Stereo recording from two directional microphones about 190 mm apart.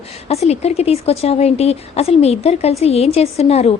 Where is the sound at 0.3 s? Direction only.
35° left (ahead or behind).